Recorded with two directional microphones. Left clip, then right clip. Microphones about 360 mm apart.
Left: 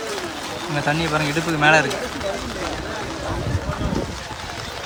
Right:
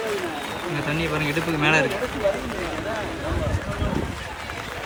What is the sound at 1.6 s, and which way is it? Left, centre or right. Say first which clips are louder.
Speech: left 5 dB; centre.